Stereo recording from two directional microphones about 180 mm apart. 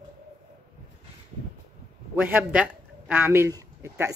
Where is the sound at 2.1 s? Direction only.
10° right (ahead or behind).